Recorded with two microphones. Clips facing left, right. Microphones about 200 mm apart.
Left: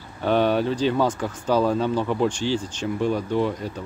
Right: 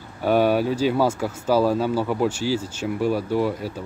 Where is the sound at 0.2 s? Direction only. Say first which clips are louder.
Right 1 dB; 10° right (ahead or behind).